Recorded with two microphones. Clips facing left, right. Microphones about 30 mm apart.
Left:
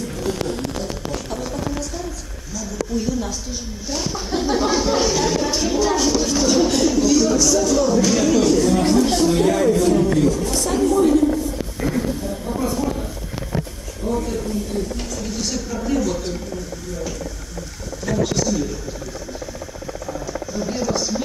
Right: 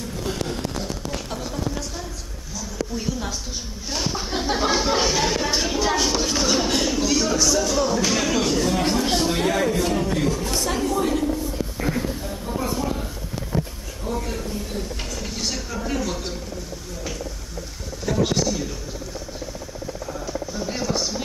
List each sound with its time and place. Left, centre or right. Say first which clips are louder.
1.1 s a sound: left 3 dB; centre
10.1 s speech: left 5 dB; centre
11.5 s a sound: left 2 dB; centre
14.0 s speech: left 5 dB; centre
18.0 s speech: left 1 dB; centre
20.5 s speech: left 4 dB; centre